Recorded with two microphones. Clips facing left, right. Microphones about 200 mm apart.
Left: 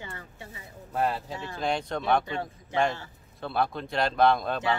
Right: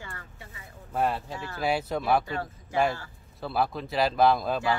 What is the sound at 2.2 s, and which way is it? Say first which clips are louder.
Speech: even; 20° left (ahead or behind).